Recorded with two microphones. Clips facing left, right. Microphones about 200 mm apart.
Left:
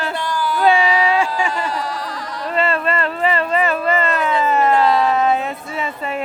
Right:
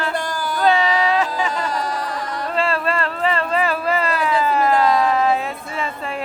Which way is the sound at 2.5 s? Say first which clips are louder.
Left 2 dB; centre (ahead or behind).